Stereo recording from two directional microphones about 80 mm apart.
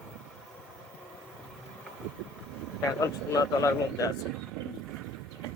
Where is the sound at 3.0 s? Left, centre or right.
Left.